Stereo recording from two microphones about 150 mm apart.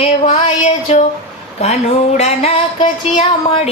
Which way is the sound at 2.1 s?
45° left (ahead or behind).